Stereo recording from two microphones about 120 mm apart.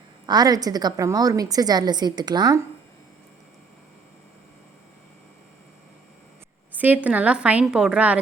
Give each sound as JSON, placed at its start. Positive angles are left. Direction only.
{"t": 0.3, "sound": "a woman's voice", "side_deg": -30}
{"t": 6.7, "sound": "a woman's voice", "side_deg": -15}